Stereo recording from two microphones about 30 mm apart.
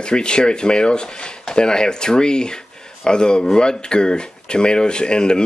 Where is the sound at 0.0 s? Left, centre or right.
Left.